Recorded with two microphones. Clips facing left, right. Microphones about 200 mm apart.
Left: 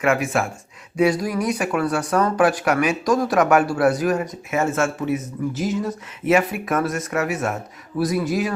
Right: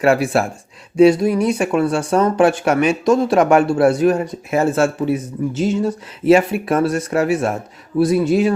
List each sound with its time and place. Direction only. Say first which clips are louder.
0.0 s speech: right 5 dB; 35° right (ahead or behind)